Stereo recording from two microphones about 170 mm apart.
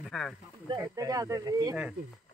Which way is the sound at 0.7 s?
20° right (ahead or behind).